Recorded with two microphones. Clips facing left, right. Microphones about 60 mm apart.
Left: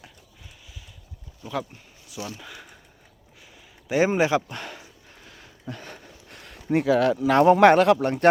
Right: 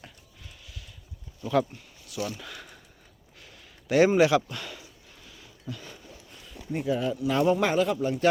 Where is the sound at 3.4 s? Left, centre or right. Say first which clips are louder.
Even; centre.